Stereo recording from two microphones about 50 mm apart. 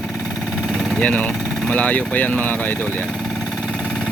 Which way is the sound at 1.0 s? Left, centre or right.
Left.